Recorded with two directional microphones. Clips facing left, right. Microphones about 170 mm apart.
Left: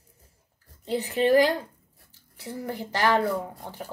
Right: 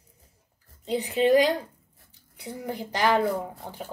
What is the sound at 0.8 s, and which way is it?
Speech, 15° right (ahead or behind).